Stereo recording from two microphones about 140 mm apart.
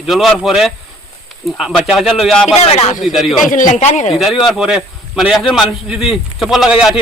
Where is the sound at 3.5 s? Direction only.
65° left (ahead or behind).